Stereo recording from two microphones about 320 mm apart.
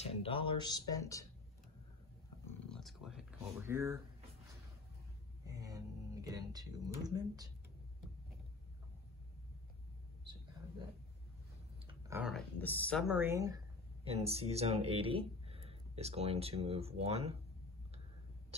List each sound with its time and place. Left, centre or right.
0.0 s speech: centre
2.7 s speech: centre
5.5 s speech: centre
11.9 s speech: centre